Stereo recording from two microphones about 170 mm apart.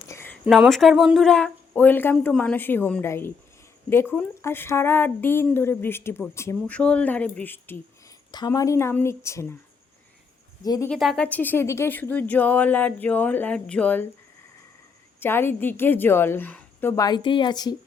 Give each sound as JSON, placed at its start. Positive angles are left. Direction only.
{"t": 0.1, "sound": "a sound", "side_deg": 15}
{"t": 0.4, "sound": "speech", "side_deg": 0}
{"t": 8.3, "sound": "speech", "side_deg": 20}
{"t": 10.6, "sound": "a woman's voice", "side_deg": 20}
{"t": 10.8, "sound": "speech", "side_deg": 0}
{"t": 15.2, "sound": "speech", "side_deg": 15}